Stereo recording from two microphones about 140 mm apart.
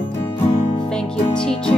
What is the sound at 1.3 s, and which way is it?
Music, 35° left (ahead or behind).